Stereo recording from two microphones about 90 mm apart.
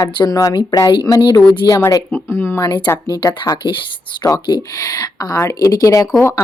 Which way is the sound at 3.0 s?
40° left (ahead or behind).